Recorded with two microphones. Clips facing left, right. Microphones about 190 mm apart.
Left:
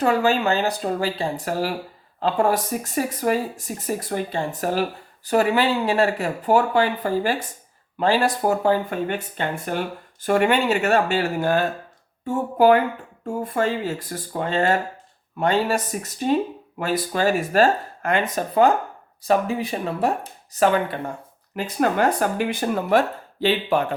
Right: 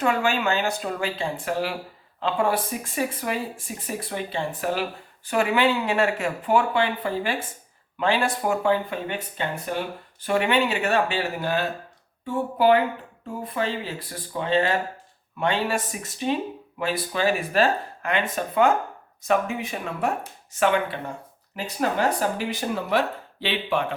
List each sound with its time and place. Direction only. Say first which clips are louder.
0.0 s speech: left 4 dB; 35° left (ahead or behind)
21.5 s speech: left 4 dB; 55° left (ahead or behind)